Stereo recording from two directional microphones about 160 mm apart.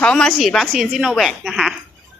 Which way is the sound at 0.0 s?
5° left (ahead or behind).